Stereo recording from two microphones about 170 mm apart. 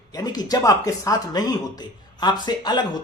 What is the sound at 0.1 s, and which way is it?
Speech, 20° left (ahead or behind).